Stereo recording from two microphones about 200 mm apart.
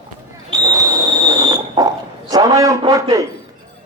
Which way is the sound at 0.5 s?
20° right (ahead or behind).